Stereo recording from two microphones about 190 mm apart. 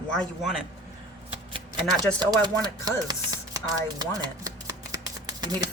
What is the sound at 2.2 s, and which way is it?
Speech, 20° right (ahead or behind).